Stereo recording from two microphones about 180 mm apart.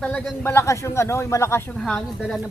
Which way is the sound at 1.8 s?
5° left (ahead or behind).